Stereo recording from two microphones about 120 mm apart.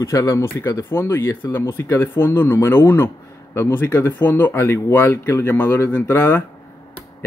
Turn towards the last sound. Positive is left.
turn(degrees=20)  # may be behind; listen again after turning